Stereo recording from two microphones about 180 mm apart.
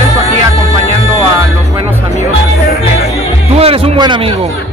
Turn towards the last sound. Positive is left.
turn(degrees=-30)  # may be behind; listen again after turning